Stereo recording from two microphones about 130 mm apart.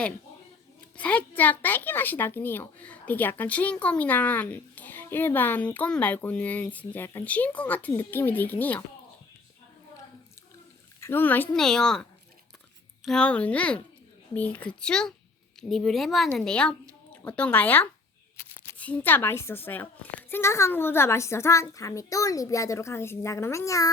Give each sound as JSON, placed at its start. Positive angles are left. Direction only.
{"t": 0.9, "sound": "speech", "side_deg": 10}
{"t": 11.0, "sound": "speech", "side_deg": 15}